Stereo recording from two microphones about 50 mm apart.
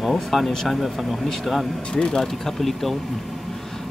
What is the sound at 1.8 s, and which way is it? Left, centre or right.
Speech, centre.